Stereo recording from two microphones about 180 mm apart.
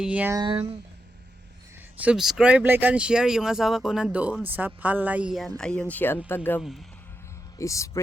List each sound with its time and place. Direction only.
0.0 s speech: 5° right (ahead or behind)
0.3 s speech: 30° right (ahead or behind)
2.0 s speech: 5° right (ahead or behind); by 6.6 s 10° left (ahead or behind)
6.6 s speech: centre (ahead or behind)
7.6 s speech: 15° left (ahead or behind)